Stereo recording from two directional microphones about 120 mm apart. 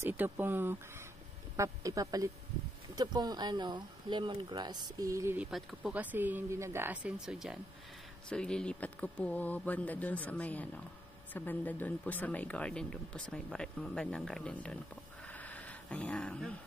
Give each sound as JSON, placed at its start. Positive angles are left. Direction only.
{"t": 0.0, "sound": "speech", "side_deg": -15}
{"t": 1.6, "sound": "speech", "side_deg": -30}
{"t": 5.4, "sound": "speech", "side_deg": -5}
{"t": 5.9, "sound": "speech", "side_deg": -15}
{"t": 8.3, "sound": "speech", "side_deg": 5}
{"t": 15.2, "sound": "a sound", "side_deg": 15}